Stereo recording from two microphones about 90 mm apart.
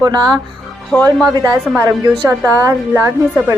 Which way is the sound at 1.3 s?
40° right (ahead or behind).